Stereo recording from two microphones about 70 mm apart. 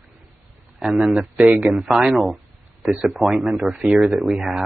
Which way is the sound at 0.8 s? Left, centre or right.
Centre.